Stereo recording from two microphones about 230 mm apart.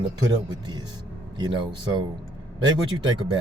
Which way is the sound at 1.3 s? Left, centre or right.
Centre.